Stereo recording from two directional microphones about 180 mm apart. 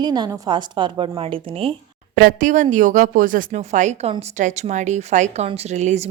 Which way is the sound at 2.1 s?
50° right (ahead or behind).